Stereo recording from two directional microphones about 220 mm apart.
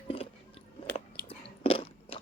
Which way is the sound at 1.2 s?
25° left (ahead or behind).